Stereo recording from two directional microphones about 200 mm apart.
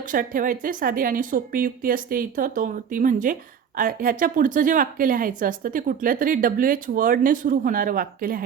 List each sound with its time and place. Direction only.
0.1 s speech: 40° right (ahead or behind)